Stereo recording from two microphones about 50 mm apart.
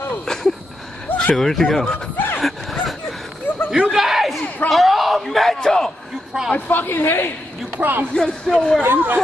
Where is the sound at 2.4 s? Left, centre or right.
Centre.